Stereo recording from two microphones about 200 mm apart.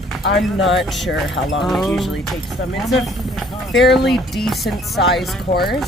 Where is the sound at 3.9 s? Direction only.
Centre (ahead or behind).